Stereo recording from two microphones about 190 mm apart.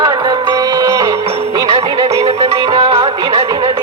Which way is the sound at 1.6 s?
30° right (ahead or behind).